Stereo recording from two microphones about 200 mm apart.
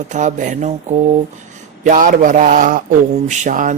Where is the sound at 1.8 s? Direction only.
40° right (ahead or behind).